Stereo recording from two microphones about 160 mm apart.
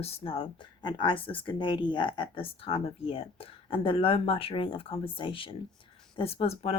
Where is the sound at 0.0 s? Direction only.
40° left (ahead or behind).